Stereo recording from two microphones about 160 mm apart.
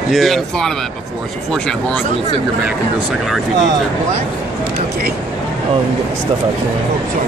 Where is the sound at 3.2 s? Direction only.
Centre (ahead or behind).